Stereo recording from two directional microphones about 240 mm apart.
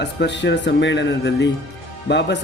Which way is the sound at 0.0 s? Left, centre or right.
Left.